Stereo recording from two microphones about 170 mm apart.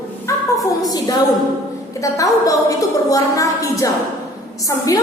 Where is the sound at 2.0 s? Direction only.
20° left (ahead or behind).